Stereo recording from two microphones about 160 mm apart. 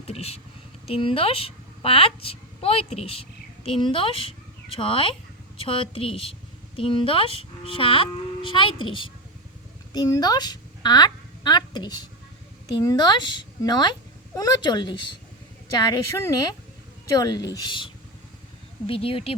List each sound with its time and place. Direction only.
0.1 s a woman's voice: 40° left (ahead or behind)